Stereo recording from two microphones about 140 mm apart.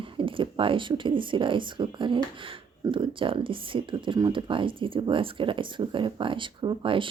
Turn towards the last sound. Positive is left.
turn(degrees=-35)  # may be behind; listen again after turning